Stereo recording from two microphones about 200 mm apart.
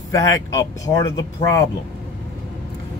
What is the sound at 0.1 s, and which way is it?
Speech, 15° left (ahead or behind).